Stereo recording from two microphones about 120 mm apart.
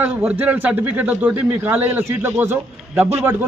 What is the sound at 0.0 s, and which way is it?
A man's voice, 15° right (ahead or behind).